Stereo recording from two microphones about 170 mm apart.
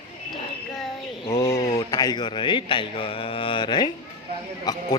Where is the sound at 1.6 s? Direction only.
35° left (ahead or behind).